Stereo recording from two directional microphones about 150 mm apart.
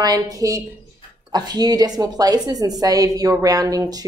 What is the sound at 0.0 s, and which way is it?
A woman's voice, 25° right (ahead or behind).